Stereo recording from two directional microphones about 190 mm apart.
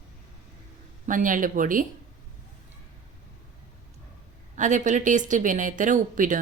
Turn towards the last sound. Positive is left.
turn(degrees=-45)  # may be behind; listen again after turning